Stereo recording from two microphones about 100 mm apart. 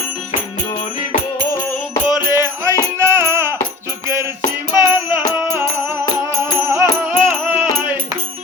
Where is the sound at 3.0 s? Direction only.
25° right (ahead or behind).